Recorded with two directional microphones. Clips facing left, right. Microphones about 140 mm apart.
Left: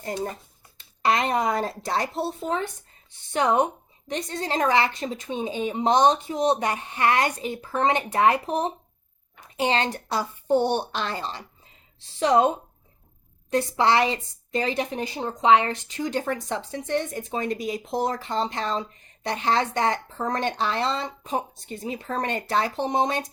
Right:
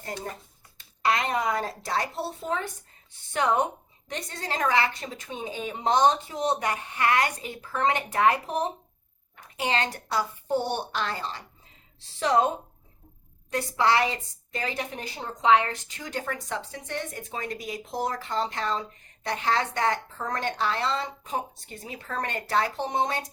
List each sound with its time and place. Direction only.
1.0 s a woman's voice: 30° left (ahead or behind)
9.6 s a woman's voice: 25° left (ahead or behind)
13.5 s a woman's voice: 25° left (ahead or behind)